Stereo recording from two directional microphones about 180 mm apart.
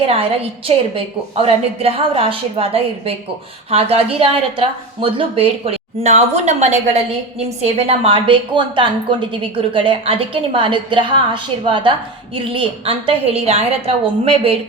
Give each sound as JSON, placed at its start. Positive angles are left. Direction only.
{"t": 0.0, "sound": "a woman's voice", "side_deg": -30}